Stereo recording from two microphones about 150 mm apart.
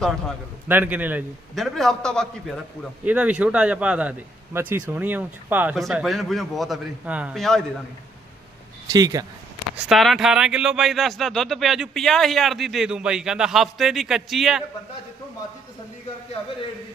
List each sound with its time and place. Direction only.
0.7 s speech: 10° right (ahead or behind)
1.5 s speech: centre (ahead or behind)
3.0 s speech: 10° right (ahead or behind)
7.3 s speech: 5° left (ahead or behind)
8.9 s speech: 25° right (ahead or behind)
9.7 s speech: centre (ahead or behind)